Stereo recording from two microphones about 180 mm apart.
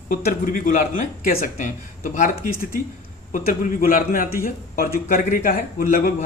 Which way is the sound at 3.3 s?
50° left (ahead or behind).